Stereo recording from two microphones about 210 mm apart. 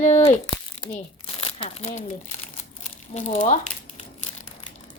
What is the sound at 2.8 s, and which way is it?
Crumpling, 35° left (ahead or behind).